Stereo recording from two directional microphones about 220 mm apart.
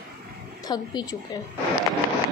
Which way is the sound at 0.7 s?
20° left (ahead or behind).